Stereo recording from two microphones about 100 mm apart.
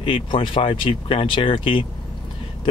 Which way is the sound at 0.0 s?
60° left (ahead or behind).